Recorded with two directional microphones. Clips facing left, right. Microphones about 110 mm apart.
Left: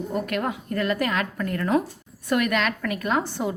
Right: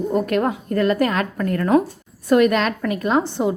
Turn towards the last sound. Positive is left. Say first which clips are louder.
# right 6 dB
turn(degrees=-25)  # may be behind; listen again after turning